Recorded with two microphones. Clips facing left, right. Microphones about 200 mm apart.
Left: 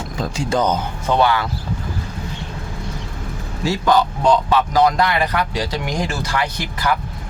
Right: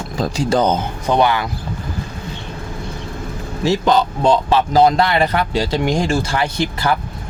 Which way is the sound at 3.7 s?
25° right (ahead or behind).